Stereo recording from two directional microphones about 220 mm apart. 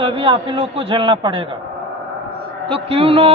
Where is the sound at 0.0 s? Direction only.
20° right (ahead or behind).